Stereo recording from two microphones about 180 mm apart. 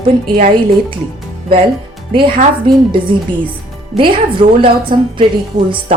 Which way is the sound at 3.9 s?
30° right (ahead or behind).